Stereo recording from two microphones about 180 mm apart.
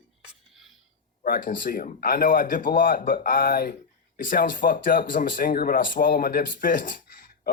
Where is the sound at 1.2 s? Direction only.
50° left (ahead or behind).